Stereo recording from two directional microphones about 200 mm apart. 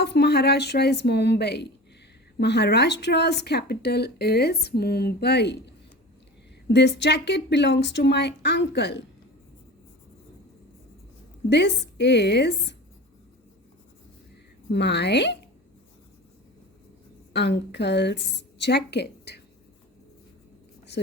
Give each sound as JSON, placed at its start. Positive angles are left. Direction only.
{"t": 0.0, "sound": "speech", "side_deg": 55}
{"t": 11.4, "sound": "speech", "side_deg": 60}
{"t": 14.7, "sound": "speech", "side_deg": 60}
{"t": 17.3, "sound": "speech", "side_deg": 60}
{"t": 20.9, "sound": "a sound", "side_deg": 55}